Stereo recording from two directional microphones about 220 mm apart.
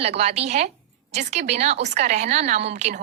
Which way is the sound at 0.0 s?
30° right (ahead or behind).